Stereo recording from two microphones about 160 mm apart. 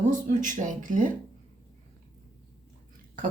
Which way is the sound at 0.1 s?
55° right (ahead or behind).